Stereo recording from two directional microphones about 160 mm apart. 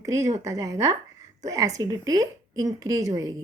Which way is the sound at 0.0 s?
20° right (ahead or behind).